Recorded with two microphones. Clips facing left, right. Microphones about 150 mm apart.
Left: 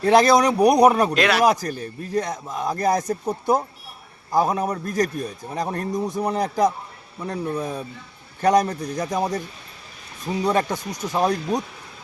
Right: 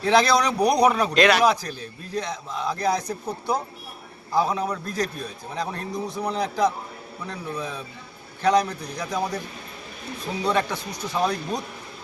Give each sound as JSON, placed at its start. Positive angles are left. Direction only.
{"t": 0.0, "sound": "a man's voice", "side_deg": 45}
{"t": 1.1, "sound": "speech", "side_deg": 5}
{"t": 1.5, "sound": "a man's voice", "side_deg": 50}
{"t": 4.3, "sound": "a man's voice", "side_deg": 45}
{"t": 10.4, "sound": "a man's voice", "side_deg": 45}